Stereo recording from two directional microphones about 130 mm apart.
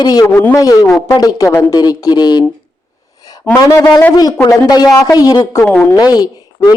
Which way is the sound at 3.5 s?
30° left (ahead or behind).